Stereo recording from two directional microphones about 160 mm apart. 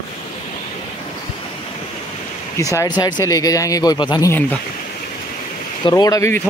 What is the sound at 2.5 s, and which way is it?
Speech, 20° left (ahead or behind).